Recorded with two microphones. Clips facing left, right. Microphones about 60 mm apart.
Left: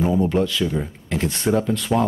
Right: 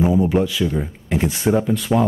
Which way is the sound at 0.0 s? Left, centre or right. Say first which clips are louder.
Right 2 dB; centre.